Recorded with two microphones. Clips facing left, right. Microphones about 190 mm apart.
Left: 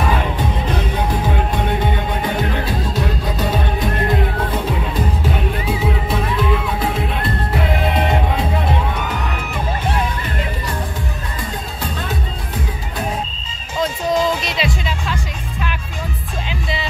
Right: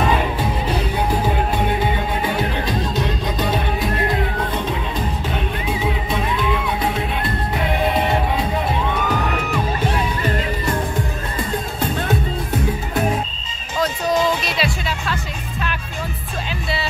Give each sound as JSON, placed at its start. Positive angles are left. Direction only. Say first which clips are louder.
{"t": 14.4, "sound": "music", "louder": "left 1 dB", "side_deg": 20}